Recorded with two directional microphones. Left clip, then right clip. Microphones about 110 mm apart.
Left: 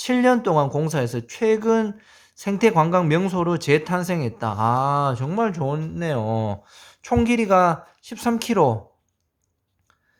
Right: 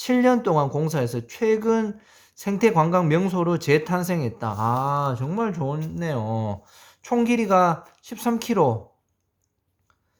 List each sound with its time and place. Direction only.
0.0 s speech: 15° left (ahead or behind)